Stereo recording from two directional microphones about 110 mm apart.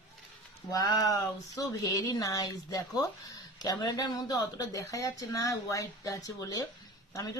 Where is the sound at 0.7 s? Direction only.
35° left (ahead or behind).